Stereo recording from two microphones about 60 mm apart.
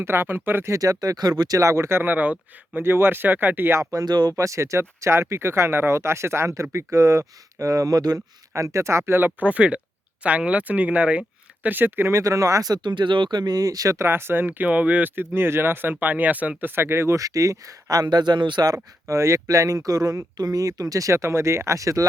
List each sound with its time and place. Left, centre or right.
0.0 s speech: right
0.7 s speech: right
2.0 s speech: right
2.8 s speech: right
3.9 s speech: right
6.5 s speech: right
9.4 s speech: right
11.7 s speech: right
12.2 s speech: right
13.5 s speech: right
14.0 s speech: right
15.1 s speech: right
17.2 s speech: right